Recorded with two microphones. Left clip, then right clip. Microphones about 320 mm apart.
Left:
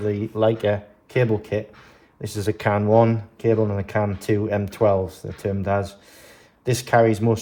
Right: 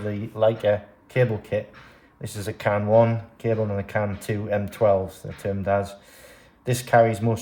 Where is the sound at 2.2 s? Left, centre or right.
Centre.